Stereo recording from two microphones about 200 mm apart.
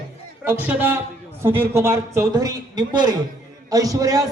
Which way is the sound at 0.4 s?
10° right (ahead or behind).